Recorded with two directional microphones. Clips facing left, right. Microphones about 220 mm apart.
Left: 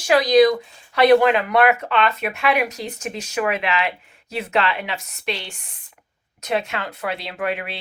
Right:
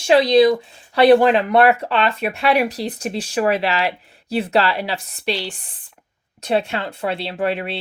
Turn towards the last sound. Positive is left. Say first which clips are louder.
# right 4 dB
turn(degrees=-30)  # may be behind; listen again after turning